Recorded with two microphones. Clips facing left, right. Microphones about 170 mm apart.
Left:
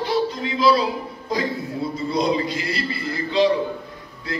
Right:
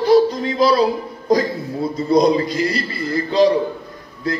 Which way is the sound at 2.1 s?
40° right (ahead or behind).